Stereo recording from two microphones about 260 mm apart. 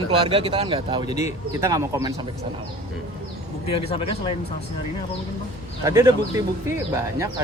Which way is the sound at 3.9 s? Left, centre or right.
Left.